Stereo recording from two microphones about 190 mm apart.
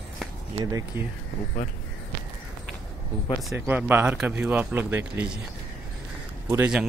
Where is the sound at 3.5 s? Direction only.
10° right (ahead or behind).